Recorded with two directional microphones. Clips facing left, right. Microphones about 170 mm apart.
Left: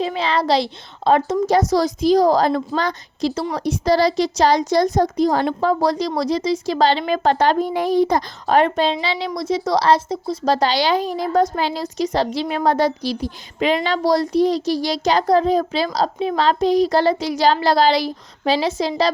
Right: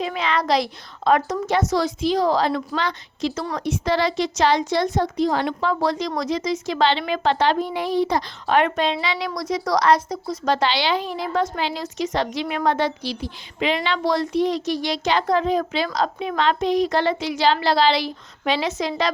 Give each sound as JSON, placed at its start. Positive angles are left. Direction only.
{"t": 0.0, "sound": "speech", "side_deg": 30}